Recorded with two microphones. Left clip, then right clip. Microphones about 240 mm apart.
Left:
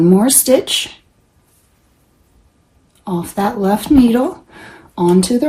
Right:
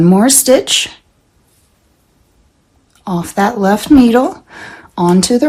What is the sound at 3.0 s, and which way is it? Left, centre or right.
Speech, right.